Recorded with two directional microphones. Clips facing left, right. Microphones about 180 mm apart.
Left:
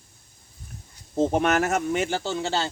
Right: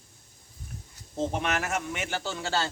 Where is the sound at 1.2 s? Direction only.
45° left (ahead or behind); by 2.6 s 20° left (ahead or behind).